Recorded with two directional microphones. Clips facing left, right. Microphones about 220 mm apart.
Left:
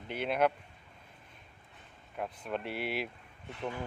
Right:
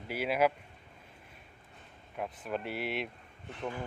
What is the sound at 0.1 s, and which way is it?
Speech, 5° right (ahead or behind).